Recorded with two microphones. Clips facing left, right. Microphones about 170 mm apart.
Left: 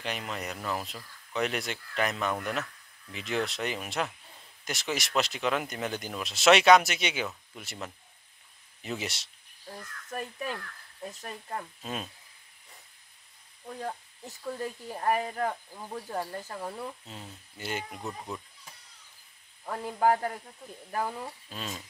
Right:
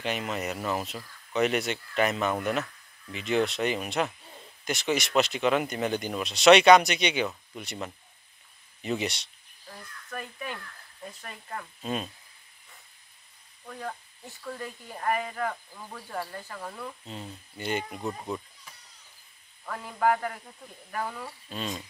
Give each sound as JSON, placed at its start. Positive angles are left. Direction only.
{"t": 0.0, "sound": "speech", "side_deg": -5}
{"t": 11.1, "sound": "speech", "side_deg": 25}
{"t": 11.8, "sound": "speech", "side_deg": 0}
{"t": 13.7, "sound": "speech", "side_deg": 20}
{"t": 17.6, "sound": "speech", "side_deg": 5}
{"t": 18.0, "sound": "speech", "side_deg": -15}
{"t": 19.6, "sound": "speech", "side_deg": 30}
{"t": 21.0, "sound": "speech", "side_deg": 20}
{"t": 21.5, "sound": "speech", "side_deg": 5}